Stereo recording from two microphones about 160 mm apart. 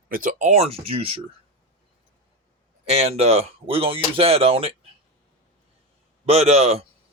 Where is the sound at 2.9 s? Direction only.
40° right (ahead or behind).